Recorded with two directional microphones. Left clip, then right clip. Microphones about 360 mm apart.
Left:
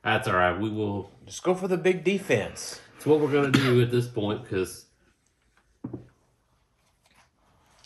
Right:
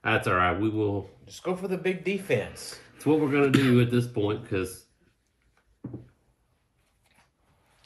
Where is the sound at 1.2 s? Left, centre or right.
Left.